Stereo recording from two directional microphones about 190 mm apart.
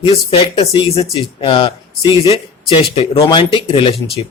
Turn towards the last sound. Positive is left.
turn(degrees=25)  # may be behind; listen again after turning